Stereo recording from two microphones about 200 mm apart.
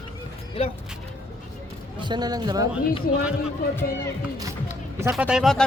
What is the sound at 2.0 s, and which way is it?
Speech, 20° right (ahead or behind).